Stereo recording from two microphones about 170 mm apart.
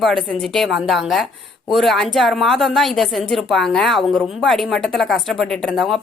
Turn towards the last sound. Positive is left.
turn(degrees=0)  # may be behind; listen again after turning